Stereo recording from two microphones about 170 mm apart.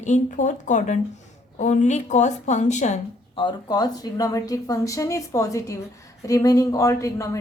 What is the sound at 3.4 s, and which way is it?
Speech, 30° left (ahead or behind).